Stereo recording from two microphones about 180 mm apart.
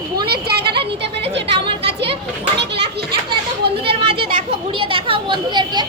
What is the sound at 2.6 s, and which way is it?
Children playing, 70° right (ahead or behind).